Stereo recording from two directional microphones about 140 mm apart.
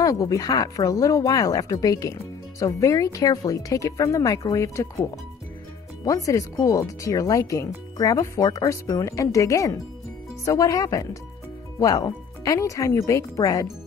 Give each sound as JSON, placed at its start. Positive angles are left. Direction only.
{"t": 0.0, "sound": "speech", "side_deg": 25}
{"t": 6.0, "sound": "speech", "side_deg": 25}